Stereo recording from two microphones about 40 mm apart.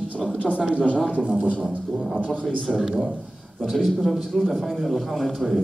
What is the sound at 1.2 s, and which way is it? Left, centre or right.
Speech, right.